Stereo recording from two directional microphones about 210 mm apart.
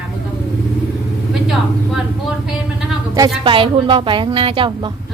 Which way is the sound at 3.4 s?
25° right (ahead or behind).